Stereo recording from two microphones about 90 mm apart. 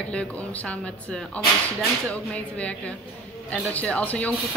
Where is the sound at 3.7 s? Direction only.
15° left (ahead or behind).